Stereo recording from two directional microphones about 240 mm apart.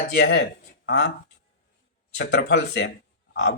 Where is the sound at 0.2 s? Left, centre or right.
Left.